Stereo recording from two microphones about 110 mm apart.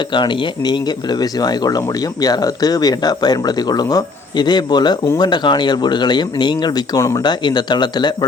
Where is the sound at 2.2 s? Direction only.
35° left (ahead or behind).